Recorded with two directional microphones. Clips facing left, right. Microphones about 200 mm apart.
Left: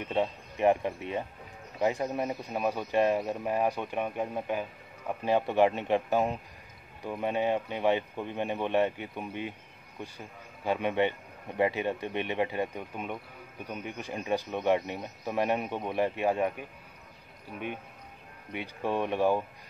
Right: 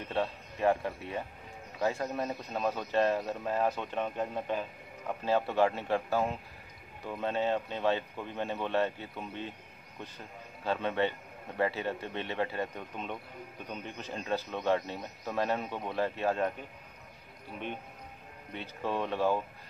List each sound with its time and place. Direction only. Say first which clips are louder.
0.0 s a man's voice: left 3 dB; 20° left (ahead or behind)
18.5 s speech: left 3 dB; 15° left (ahead or behind)